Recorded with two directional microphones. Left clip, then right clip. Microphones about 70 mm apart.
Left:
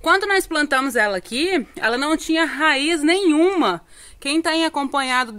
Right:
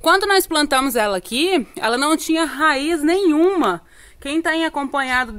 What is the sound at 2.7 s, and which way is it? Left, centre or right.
Speech, centre.